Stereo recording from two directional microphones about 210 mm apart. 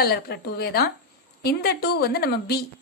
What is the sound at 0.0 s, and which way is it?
A woman's voice, 50° left (ahead or behind).